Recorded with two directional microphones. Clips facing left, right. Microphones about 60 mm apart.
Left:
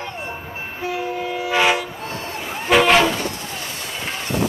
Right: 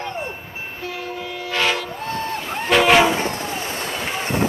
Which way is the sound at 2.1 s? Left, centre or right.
Right.